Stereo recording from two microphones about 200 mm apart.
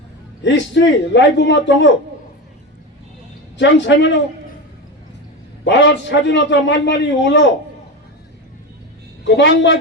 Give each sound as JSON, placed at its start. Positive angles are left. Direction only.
{"t": 0.4, "sound": "a man's voice", "side_deg": 60}
{"t": 3.6, "sound": "a man's voice", "side_deg": 65}
{"t": 5.6, "sound": "a man's voice", "side_deg": 60}
{"t": 9.2, "sound": "a man's voice", "side_deg": 65}